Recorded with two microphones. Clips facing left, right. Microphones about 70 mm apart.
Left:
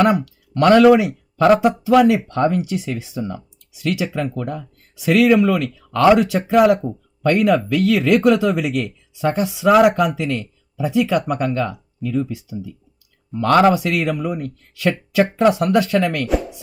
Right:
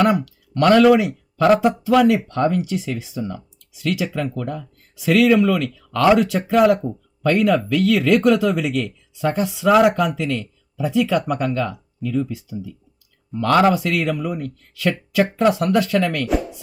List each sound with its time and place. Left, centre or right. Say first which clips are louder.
0.0 s speech: left 1 dB; left
6.8 s a sound: left 1 dB; centre
7.3 s speech: left 1 dB; centre
13.5 s speech: left 2 dB; left
13.7 s speech: left 1 dB; left